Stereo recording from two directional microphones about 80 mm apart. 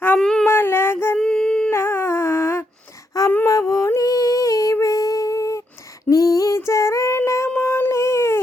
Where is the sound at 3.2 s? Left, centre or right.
Left.